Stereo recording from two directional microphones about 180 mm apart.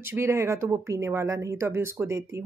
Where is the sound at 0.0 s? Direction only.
15° right (ahead or behind).